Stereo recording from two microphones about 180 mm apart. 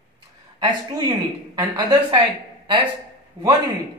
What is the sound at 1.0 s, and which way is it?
A woman's voice, 20° right (ahead or behind).